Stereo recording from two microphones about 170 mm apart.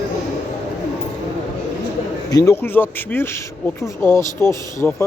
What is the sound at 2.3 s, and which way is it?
Speech, 20° left (ahead or behind).